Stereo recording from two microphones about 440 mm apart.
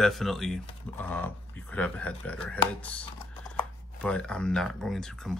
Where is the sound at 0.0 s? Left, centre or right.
Centre.